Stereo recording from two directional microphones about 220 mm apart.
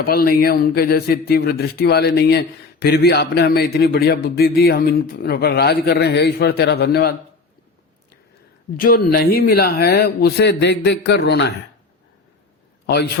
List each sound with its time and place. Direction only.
0.0 s a man's voice: 45° left (ahead or behind)
8.7 s a man's voice: 40° left (ahead or behind)